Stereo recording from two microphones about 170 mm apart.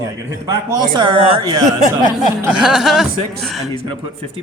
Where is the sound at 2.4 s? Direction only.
5° right (ahead or behind).